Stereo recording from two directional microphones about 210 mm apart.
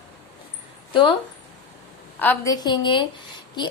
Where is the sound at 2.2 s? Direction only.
10° left (ahead or behind).